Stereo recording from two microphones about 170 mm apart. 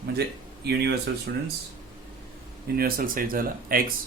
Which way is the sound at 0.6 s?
75° right (ahead or behind).